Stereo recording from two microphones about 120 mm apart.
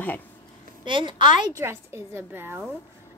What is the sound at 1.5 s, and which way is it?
A woman's voice, 25° right (ahead or behind).